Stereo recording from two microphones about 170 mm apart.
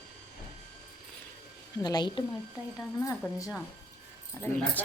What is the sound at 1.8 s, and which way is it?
A woman's voice, 25° left (ahead or behind).